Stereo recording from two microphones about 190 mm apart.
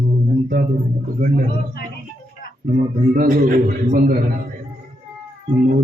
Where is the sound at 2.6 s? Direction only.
45° right (ahead or behind).